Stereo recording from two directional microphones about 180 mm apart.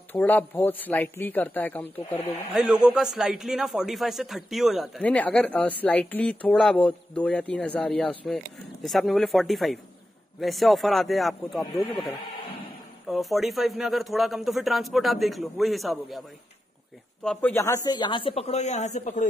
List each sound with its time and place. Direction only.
0.1 s speech: 10° left (ahead or behind)
2.5 s a man's voice: centre (ahead or behind)
13.1 s a man's voice: centre (ahead or behind); by 19.2 s 40° left (ahead or behind)